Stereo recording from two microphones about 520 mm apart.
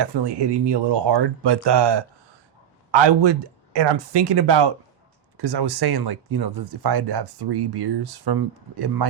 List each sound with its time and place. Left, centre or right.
0.0 s speech: right